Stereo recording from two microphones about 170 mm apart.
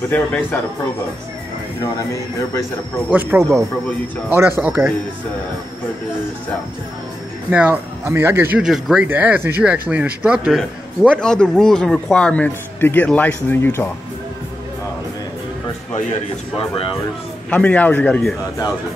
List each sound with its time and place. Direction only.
0.1 s a man's voice: 10° left (ahead or behind)
3.1 s speech: 10° right (ahead or behind)
7.5 s speech: 10° right (ahead or behind)
11.1 s a man's voice: 5° left (ahead or behind)
15.9 s speech: 40° left (ahead or behind)
17.5 s a man's voice: 10° left (ahead or behind)